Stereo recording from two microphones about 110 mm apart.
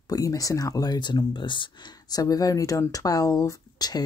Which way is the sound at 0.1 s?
30° left (ahead or behind).